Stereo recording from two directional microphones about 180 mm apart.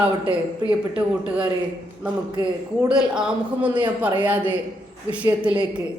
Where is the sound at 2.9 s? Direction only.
5° right (ahead or behind).